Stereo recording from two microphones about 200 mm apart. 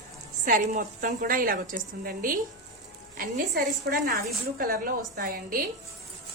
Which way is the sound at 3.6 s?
50° right (ahead or behind).